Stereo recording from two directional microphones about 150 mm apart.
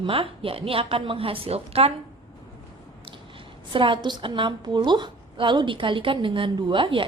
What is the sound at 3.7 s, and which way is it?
A woman's voice, 35° right (ahead or behind).